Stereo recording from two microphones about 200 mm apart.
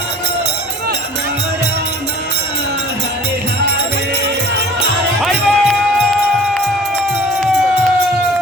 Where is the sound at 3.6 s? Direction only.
55° right (ahead or behind).